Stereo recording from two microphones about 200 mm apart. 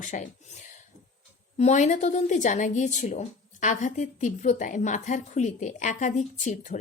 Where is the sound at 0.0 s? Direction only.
35° left (ahead or behind).